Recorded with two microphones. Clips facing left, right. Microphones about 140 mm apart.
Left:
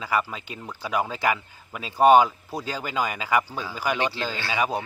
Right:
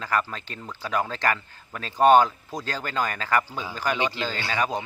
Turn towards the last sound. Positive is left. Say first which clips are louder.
# left 1 dB
turn(degrees=10)  # may be behind; listen again after turning